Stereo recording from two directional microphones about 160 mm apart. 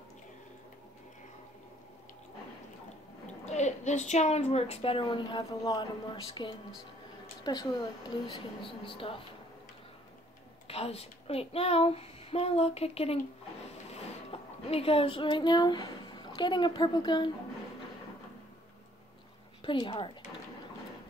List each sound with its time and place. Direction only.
3.4 s a woman's voice: 45° left (ahead or behind)
10.7 s a woman's voice: 40° left (ahead or behind)
19.6 s a woman's voice: 30° left (ahead or behind)